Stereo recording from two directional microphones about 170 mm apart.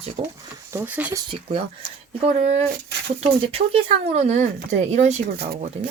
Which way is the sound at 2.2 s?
40° right (ahead or behind).